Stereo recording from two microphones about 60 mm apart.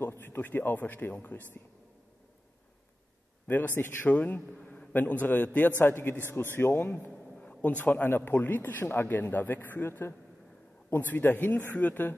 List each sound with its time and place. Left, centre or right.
0.0 s speech: left
3.4 s a man's voice: left
7.4 s a man's voice: left
9.1 s speech: left
10.9 s speech: left